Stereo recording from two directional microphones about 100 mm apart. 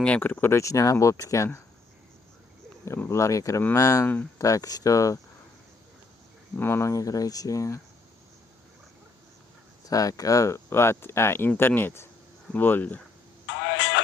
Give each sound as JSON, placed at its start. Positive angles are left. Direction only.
{"t": 0.0, "sound": "speech", "side_deg": 15}
{"t": 2.8, "sound": "speech", "side_deg": 30}
{"t": 4.0, "sound": "speech", "side_deg": 15}
{"t": 4.4, "sound": "speech", "side_deg": 35}
{"t": 6.6, "sound": "speech", "side_deg": 25}
{"t": 9.9, "sound": "speech", "side_deg": 35}